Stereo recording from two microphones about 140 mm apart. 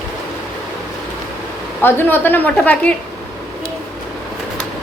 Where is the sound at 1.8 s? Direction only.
15° left (ahead or behind).